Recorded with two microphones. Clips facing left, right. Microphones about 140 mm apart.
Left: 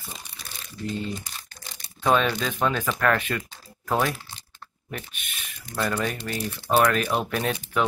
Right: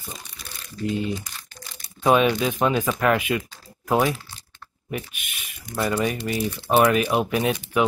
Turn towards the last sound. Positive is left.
turn(degrees=-10)  # may be behind; listen again after turning